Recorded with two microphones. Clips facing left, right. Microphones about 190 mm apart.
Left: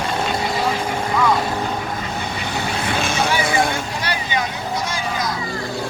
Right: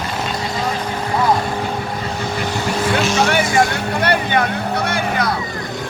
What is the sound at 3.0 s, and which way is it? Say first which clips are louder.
Music: right 4 dB; 55° left (ahead or behind).